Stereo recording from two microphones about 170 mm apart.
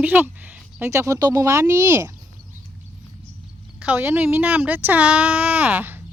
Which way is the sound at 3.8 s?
10° right (ahead or behind).